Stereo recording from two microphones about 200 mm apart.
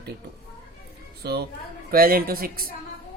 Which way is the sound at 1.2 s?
50° right (ahead or behind).